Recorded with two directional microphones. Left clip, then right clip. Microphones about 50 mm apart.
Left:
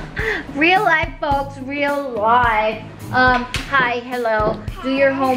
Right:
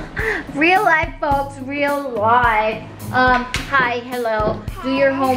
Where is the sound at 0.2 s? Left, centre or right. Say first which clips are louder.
Even; centre.